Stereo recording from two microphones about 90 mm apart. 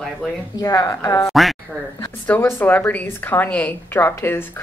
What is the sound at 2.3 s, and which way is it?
Speech, 15° left (ahead or behind).